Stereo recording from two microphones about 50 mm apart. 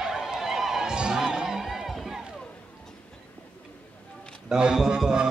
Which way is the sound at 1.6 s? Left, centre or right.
Centre.